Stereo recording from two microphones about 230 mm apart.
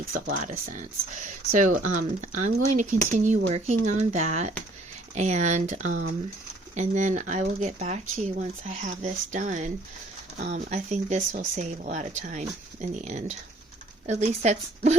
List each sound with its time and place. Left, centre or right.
0.1 s speech: right